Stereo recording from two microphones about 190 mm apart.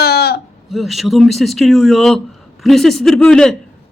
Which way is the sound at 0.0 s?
55° left (ahead or behind).